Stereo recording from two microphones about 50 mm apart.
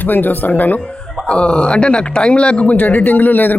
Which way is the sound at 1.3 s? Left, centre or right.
Left.